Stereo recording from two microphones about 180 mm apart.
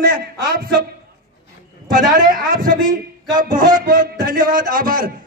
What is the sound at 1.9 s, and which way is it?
A man's voice, 50° right (ahead or behind).